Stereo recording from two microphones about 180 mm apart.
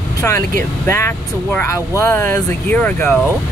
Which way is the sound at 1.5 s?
15° left (ahead or behind).